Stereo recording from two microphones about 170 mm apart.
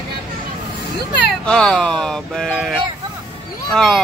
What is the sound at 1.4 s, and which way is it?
Speech, 5° left (ahead or behind).